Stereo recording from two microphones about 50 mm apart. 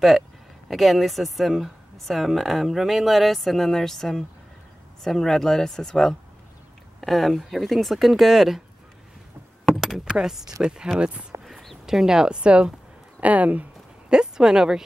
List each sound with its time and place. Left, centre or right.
0.7 s a woman's voice: centre
9.8 s speech: centre
13.2 s a sound: right
14.1 s speech: centre